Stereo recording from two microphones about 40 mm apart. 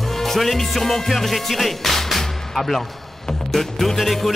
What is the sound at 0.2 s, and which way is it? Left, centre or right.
Music, centre.